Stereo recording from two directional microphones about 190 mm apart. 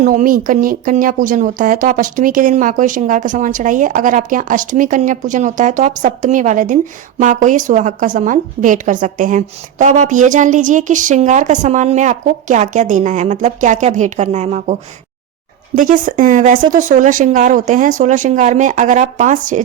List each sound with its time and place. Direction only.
0.0 s a woman's voice: 45° right (ahead or behind)